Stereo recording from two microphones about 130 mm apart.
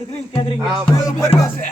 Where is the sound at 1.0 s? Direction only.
25° left (ahead or behind).